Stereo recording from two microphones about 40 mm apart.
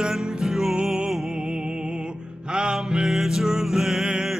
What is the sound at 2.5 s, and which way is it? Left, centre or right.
Music, centre.